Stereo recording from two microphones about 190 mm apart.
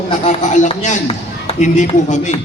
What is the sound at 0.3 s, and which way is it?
A man's voice, 40° left (ahead or behind).